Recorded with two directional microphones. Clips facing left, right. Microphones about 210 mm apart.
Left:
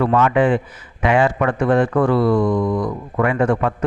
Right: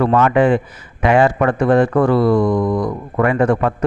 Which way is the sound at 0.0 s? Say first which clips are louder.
Right 2 dB; 45° right (ahead or behind).